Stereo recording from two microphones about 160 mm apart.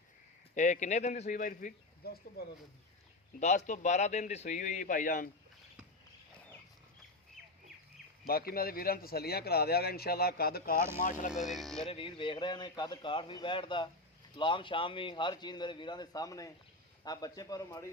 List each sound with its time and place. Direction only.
0.5 s a man's voice: 50° left (ahead or behind)
2.0 s speech: 80° left
3.4 s a man's voice: 50° left (ahead or behind)
8.3 s speech: 70° left (ahead or behind)
11.0 s a man's voice: 55° left (ahead or behind)
11.3 s speech: centre (ahead or behind)
11.9 s a man's voice: 35° left (ahead or behind)